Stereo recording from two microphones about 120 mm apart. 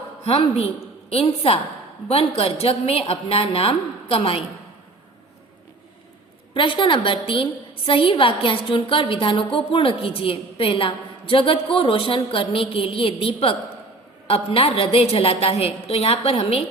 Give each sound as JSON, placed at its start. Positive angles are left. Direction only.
{"t": 0.3, "sound": "a woman's voice", "side_deg": 60}
{"t": 6.5, "sound": "a woman's voice", "side_deg": 45}